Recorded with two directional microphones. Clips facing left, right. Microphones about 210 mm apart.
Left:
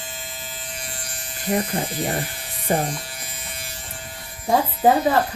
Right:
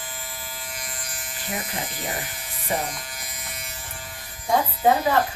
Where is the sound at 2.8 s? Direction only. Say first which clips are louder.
Left 5 dB; 30° left (ahead or behind).